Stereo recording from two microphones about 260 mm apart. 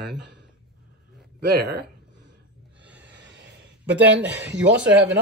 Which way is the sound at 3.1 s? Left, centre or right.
Right.